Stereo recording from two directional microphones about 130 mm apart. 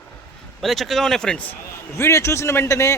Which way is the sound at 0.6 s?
Centre (ahead or behind).